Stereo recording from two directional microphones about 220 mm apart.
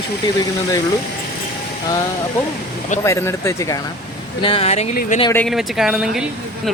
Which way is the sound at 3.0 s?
10° left (ahead or behind).